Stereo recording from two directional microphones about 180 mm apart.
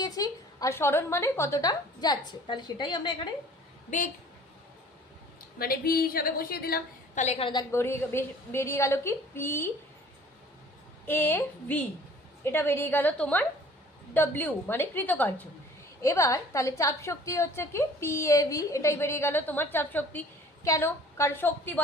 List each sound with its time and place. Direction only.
0.0 s a woman's voice: 20° left (ahead or behind)
3.8 s a woman's voice: 45° left (ahead or behind)
5.5 s a woman's voice: 55° left (ahead or behind)
7.3 s a woman's voice: 30° left (ahead or behind)
7.7 s a woman's voice: 15° left (ahead or behind)
11.0 s a woman's voice: 10° left (ahead or behind)